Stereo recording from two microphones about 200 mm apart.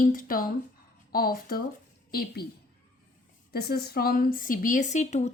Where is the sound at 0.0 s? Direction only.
45° left (ahead or behind).